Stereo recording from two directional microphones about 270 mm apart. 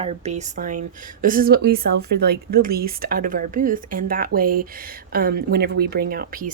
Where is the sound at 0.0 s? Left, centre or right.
Right.